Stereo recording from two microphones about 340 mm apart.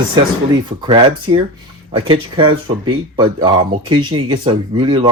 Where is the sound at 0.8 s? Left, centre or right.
Centre.